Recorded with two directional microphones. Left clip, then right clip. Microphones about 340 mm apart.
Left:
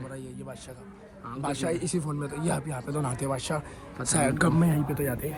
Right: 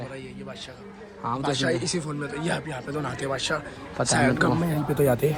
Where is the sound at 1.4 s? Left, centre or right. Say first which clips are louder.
Right 3 dB; centre.